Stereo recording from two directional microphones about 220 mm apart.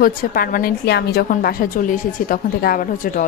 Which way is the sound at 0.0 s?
40° left (ahead or behind).